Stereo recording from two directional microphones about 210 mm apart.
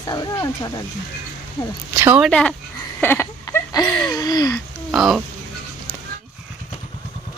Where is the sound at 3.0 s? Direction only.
10° left (ahead or behind).